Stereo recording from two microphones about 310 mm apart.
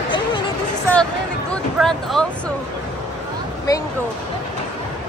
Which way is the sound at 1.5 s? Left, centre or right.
Centre.